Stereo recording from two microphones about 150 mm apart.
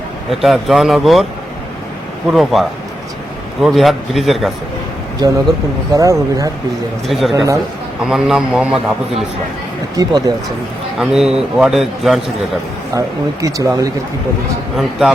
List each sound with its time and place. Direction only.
0.3 s a man's voice: centre (ahead or behind)
2.3 s a man's voice: centre (ahead or behind)
5.9 s speech: 25° right (ahead or behind)
7.1 s a man's voice: centre (ahead or behind)
7.3 s speech: 20° right (ahead or behind)
8.0 s a man's voice: 5° right (ahead or behind)
9.9 s speech: 25° right (ahead or behind)
10.9 s a man's voice: centre (ahead or behind)
13.0 s speech: 20° right (ahead or behind)
14.8 s a man's voice: centre (ahead or behind)